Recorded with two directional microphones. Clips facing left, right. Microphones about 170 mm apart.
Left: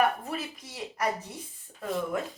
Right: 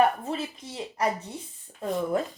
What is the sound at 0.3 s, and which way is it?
Speech, 25° right (ahead or behind).